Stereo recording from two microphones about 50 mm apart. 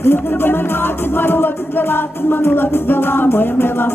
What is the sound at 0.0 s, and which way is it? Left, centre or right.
Music, left.